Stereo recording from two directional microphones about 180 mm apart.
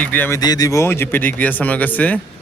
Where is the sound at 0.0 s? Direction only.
10° left (ahead or behind).